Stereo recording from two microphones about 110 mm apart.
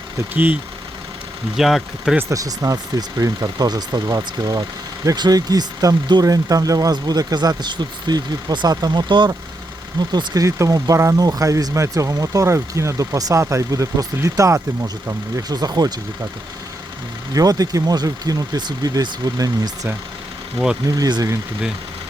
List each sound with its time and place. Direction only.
0.3 s speech: 15° right (ahead or behind)
1.5 s speech: 5° right (ahead or behind)
2.3 s speech: 30° right (ahead or behind)
17.3 s speech: 35° right (ahead or behind)
20.9 s speech: 35° right (ahead or behind)